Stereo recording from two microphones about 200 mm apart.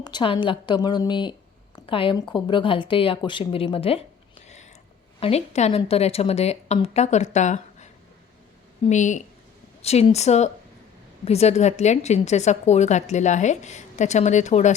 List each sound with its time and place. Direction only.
0.0 s a woman's voice: 25° left (ahead or behind)